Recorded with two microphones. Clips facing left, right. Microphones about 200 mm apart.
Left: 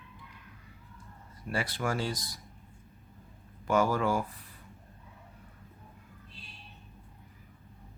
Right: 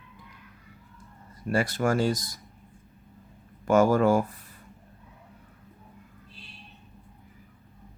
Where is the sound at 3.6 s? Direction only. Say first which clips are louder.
Right 7 dB; 45° right (ahead or behind).